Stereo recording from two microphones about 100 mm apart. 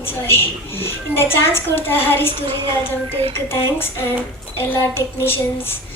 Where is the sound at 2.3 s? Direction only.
65° right (ahead or behind).